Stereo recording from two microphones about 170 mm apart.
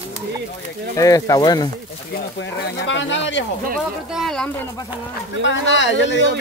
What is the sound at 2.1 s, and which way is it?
Speech, 85° left.